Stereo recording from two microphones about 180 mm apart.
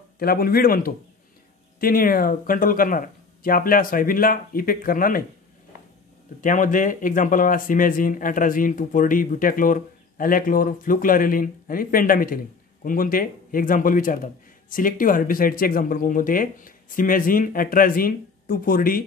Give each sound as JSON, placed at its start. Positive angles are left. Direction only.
{"t": 0.2, "sound": "a man's voice", "side_deg": 55}
{"t": 6.4, "sound": "a man's voice", "side_deg": 45}